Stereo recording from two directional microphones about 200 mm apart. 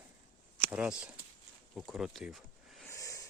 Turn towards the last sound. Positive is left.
turn(degrees=15)  # may be behind; listen again after turning